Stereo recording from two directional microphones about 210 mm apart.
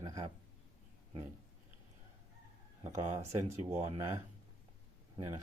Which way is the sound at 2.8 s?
15° right (ahead or behind).